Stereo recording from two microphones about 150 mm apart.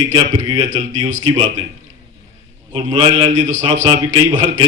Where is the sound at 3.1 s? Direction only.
50° right (ahead or behind).